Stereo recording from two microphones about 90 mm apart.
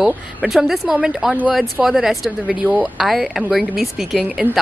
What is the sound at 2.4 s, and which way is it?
Speech, 15° right (ahead or behind).